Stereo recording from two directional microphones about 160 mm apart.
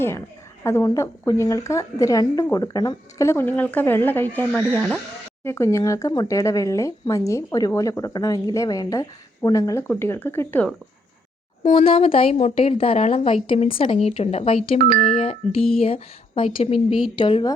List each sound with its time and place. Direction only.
0.6 s a woman's voice: 15° left (ahead or behind)
11.7 s a woman's voice: 35° left (ahead or behind)